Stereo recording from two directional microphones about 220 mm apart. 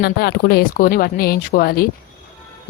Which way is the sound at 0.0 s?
45° left (ahead or behind).